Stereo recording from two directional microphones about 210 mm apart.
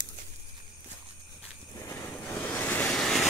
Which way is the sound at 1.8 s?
15° left (ahead or behind).